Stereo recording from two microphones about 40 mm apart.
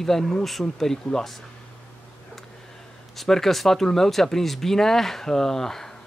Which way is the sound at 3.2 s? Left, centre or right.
Centre.